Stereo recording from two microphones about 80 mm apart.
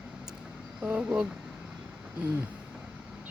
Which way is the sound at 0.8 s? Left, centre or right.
Centre.